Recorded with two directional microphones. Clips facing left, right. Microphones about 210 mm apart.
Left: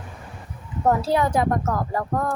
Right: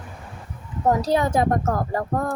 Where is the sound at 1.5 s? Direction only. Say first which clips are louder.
Right 2 dB; 45° right (ahead or behind).